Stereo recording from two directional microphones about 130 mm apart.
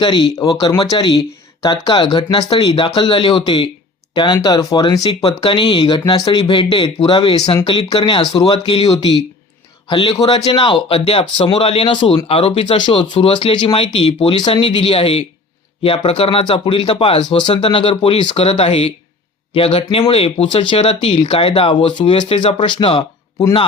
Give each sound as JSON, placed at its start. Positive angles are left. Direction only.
{"t": 0.0, "sound": "speech", "side_deg": 35}
{"t": 7.3, "sound": "speech", "side_deg": 35}
{"t": 8.5, "sound": "a man's voice", "side_deg": 45}